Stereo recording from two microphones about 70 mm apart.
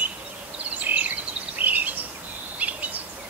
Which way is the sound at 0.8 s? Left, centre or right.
Right.